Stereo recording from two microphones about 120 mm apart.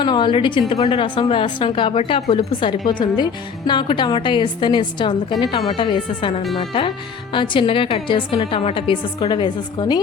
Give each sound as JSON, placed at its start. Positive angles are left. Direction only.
{"t": 0.0, "sound": "a woman's voice", "side_deg": 40}